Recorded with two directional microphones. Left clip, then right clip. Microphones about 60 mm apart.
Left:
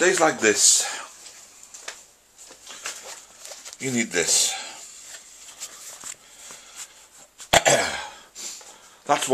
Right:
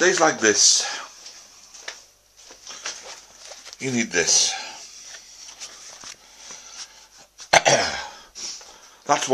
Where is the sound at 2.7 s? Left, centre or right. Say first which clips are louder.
Right 2 dB; centre.